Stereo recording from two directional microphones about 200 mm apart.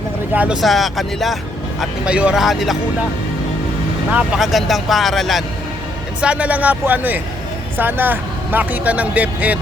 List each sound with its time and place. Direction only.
0.3 s speech: 5° right (ahead or behind)
4.1 s speech: 5° right (ahead or behind)